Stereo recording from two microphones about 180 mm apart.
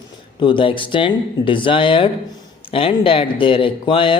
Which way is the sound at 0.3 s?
30° left (ahead or behind).